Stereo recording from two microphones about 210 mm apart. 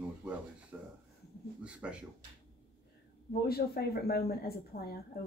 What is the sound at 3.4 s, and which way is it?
A woman's voice, 45° left (ahead or behind).